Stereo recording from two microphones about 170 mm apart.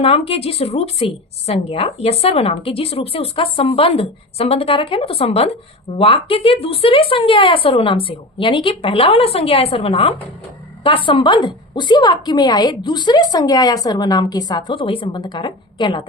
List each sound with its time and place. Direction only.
0.0 s a woman's voice: 35° left (ahead or behind)